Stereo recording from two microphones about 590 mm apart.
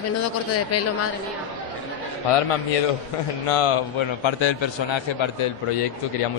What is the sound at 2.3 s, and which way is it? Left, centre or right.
A man's voice, left.